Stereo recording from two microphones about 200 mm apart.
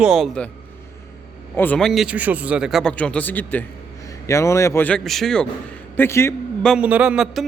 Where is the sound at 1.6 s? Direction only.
5° left (ahead or behind).